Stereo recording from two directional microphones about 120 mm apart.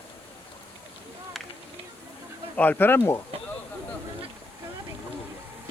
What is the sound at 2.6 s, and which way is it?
Speech, 15° left (ahead or behind).